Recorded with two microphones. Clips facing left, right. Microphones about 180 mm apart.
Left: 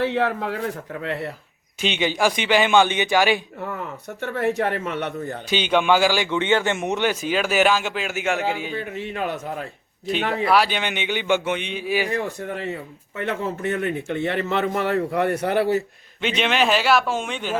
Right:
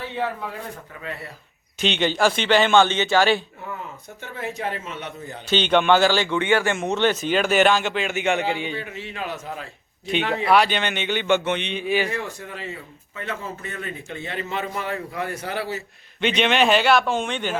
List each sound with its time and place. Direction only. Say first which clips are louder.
0.0 s a man's voice: left 6 dB; 80° left
1.8 s a man's voice: right 1 dB; 10° left (ahead or behind)
4.2 s speech: left 8 dB; 65° left (ahead or behind)
5.5 s a man's voice: right 1 dB; 10° left (ahead or behind)
8.7 s a man's voice: left 4 dB; 50° left (ahead or behind)
10.4 s a man's voice: right 1 dB; 5° left (ahead or behind)
13.1 s speech: left 6 dB; 65° left (ahead or behind)
16.2 s a man's voice: right 2 dB; centre (ahead or behind)